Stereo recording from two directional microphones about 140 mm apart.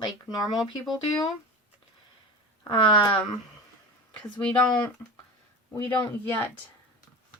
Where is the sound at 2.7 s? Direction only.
35° left (ahead or behind).